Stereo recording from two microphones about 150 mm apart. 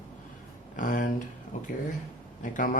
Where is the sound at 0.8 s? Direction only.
60° left (ahead or behind).